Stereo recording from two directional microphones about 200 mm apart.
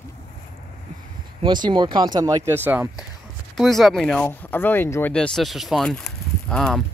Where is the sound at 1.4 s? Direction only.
20° right (ahead or behind); by 6.8 s 5° left (ahead or behind).